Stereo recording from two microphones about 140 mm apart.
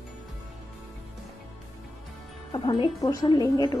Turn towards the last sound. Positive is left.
turn(degrees=30)  # may be behind; listen again after turning